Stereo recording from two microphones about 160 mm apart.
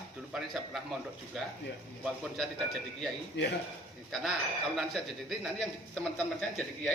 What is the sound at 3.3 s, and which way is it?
Speech, 90° left.